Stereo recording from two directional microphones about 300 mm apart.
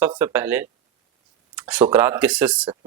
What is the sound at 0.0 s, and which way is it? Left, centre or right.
Speech, centre.